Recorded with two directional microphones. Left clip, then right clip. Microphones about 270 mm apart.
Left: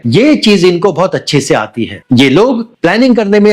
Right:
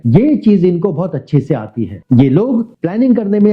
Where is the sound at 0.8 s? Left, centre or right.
Left.